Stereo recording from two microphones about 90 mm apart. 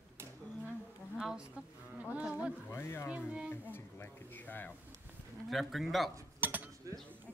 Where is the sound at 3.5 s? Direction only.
25° left (ahead or behind).